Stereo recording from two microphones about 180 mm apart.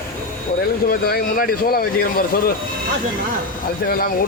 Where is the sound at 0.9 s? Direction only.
55° left (ahead or behind).